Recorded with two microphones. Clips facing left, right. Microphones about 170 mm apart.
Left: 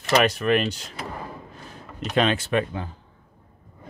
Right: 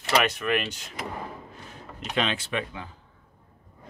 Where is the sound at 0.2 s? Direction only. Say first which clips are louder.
Left 5 dB; 35° left (ahead or behind).